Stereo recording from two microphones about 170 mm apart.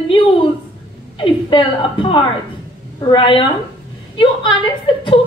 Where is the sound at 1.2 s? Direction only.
30° left (ahead or behind).